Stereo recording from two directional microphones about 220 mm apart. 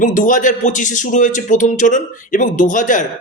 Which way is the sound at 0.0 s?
35° left (ahead or behind).